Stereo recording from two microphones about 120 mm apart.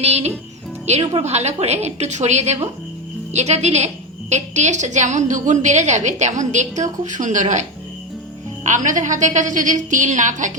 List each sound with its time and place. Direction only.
0.0 s a woman's voice: 60° right (ahead or behind); by 7.6 s 80° right
8.6 s a woman's voice: 90° right